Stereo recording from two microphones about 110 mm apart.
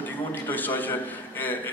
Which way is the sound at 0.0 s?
15° left (ahead or behind).